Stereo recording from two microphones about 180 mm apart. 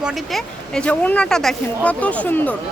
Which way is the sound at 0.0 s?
Centre (ahead or behind).